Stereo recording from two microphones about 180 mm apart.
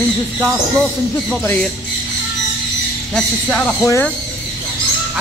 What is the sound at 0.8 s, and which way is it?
Speech, 5° left (ahead or behind).